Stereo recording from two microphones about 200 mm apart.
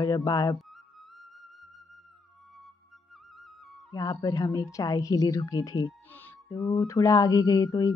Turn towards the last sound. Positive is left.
turn(degrees=15)  # may be behind; listen again after turning